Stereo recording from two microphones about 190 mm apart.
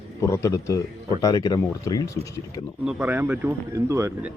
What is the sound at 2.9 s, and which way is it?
Speech, 10° right (ahead or behind).